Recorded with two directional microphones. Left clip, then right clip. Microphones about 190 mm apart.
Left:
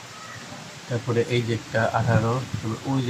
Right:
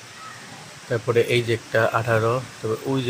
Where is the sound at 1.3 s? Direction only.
25° right (ahead or behind).